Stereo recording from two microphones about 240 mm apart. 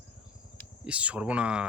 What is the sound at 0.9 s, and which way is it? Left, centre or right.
Speech, centre.